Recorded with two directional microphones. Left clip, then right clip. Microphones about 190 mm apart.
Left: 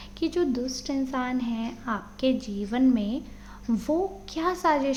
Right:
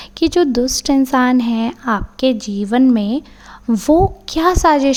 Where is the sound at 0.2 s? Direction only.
55° right (ahead or behind).